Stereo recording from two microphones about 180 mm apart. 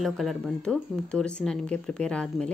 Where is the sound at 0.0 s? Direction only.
Centre (ahead or behind).